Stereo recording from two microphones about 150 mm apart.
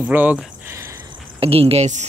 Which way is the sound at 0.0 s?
10° right (ahead or behind).